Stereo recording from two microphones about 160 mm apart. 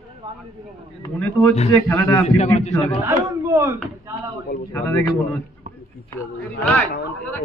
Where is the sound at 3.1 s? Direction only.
15° right (ahead or behind).